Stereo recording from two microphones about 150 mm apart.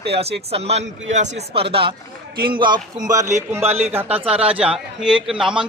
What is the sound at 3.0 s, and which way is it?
Speech, 20° right (ahead or behind).